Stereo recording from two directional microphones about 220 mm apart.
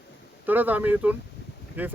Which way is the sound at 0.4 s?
10° right (ahead or behind).